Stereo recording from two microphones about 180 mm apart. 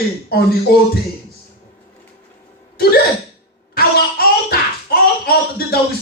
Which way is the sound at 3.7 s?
55° left (ahead or behind).